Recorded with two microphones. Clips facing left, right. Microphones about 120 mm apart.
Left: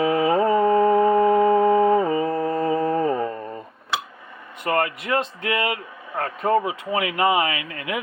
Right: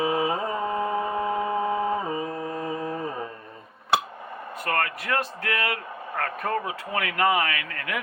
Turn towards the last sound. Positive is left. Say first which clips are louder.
# left 4 dB
turn(degrees=20)  # may be behind; listen again after turning